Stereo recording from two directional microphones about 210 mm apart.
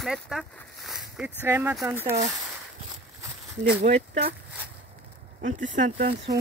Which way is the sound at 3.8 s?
30° right (ahead or behind).